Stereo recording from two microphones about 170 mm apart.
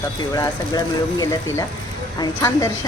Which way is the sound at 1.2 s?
20° left (ahead or behind).